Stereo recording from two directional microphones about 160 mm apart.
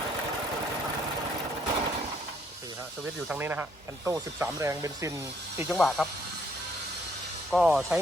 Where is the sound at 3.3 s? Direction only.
10° right (ahead or behind).